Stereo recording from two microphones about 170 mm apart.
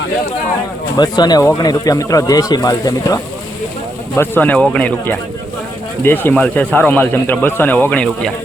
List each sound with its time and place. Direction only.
0.9 s speech: 25° left (ahead or behind)
4.1 s speech: 10° left (ahead or behind)